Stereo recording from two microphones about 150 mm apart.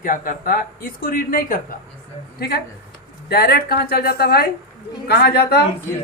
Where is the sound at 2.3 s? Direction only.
90° left.